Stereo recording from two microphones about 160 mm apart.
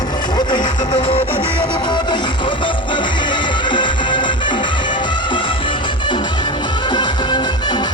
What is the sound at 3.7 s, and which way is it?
Music, 30° left (ahead or behind).